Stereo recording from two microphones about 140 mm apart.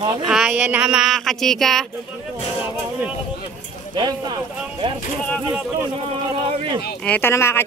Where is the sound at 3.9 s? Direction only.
30° right (ahead or behind).